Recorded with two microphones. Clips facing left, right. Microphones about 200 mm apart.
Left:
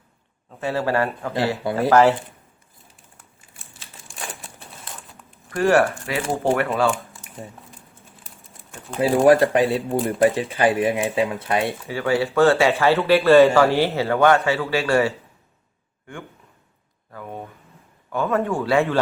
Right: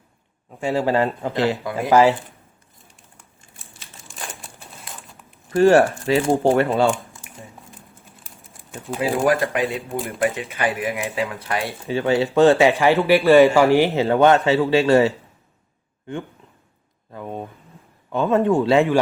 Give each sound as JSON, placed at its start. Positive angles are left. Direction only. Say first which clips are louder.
{"t": 0.6, "sound": "speech", "louder": "right 2 dB", "side_deg": -15}
{"t": 3.6, "sound": "crumpling", "louder": "even", "side_deg": 0}
{"t": 5.5, "sound": "speech", "louder": "right 4 dB", "side_deg": -30}
{"t": 8.4, "sound": "a sound", "louder": "right 6 dB", "side_deg": 0}
{"t": 9.0, "sound": "speech", "louder": "left 5 dB", "side_deg": 30}
{"t": 11.9, "sound": "speech", "louder": "right 6 dB", "side_deg": -20}
{"t": 17.1, "sound": "speech", "louder": "right 3 dB", "side_deg": -20}